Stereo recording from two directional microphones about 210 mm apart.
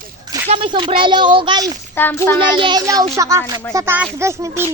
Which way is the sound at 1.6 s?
10° left (ahead or behind).